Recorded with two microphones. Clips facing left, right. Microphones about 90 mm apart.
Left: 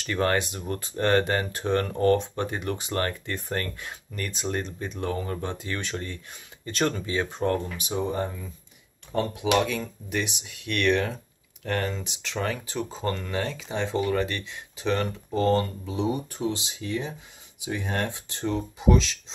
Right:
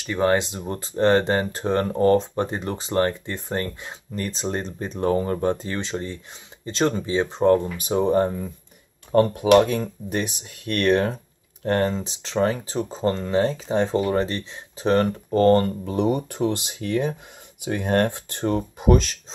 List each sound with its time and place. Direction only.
0.0 s speech: 15° right (ahead or behind)
7.7 s speech: 45° right (ahead or behind)